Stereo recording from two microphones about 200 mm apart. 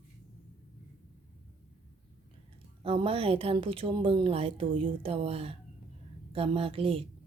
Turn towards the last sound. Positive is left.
turn(degrees=-30)  # may be behind; listen again after turning